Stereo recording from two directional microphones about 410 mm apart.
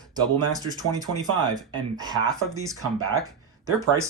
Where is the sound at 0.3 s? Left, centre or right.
Centre.